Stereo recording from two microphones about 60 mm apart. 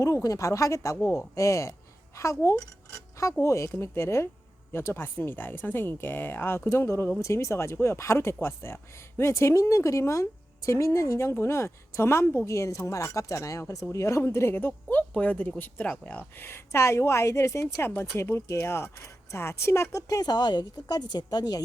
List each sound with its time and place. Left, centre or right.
0.0 s speech: left
6.7 s speech: left
14.2 s speech: left
16.3 s speech: left
21.1 s a woman's voice: left